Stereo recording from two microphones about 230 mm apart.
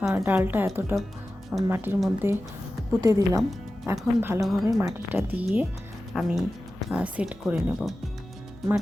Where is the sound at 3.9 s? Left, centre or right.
Centre.